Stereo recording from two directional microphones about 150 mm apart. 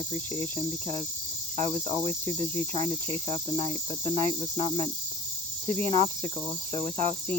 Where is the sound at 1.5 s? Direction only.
50° right (ahead or behind).